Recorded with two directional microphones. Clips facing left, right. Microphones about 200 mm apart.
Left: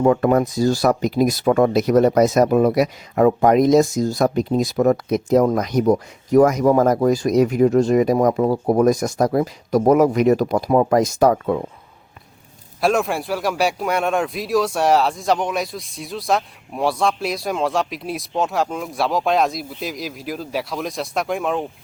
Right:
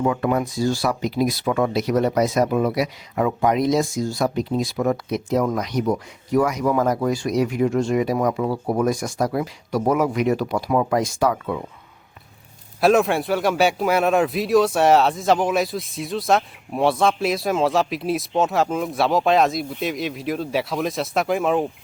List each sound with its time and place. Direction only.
0.0 s speech: 45° left (ahead or behind)
12.8 s speech: centre (ahead or behind)